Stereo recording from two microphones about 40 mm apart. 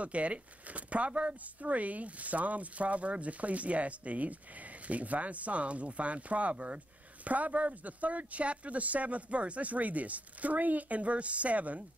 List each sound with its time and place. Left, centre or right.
0.0 s speech: right